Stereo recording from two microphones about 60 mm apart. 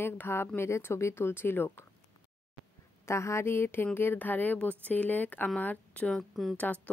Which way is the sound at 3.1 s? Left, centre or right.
Left.